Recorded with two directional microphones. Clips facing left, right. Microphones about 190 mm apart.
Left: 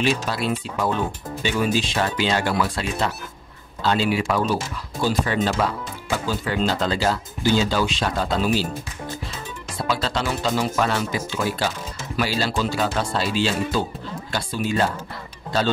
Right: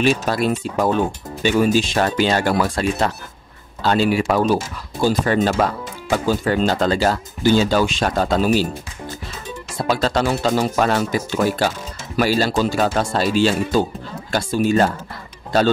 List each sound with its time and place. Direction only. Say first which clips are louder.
0.0 s speech: right 5 dB; 45° right (ahead or behind)
9.8 s speech: right 6 dB; 45° right (ahead or behind)